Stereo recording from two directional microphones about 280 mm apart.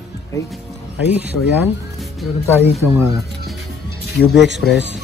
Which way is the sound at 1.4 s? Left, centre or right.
Left.